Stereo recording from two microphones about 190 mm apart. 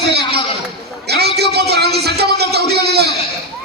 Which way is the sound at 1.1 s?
60° right (ahead or behind).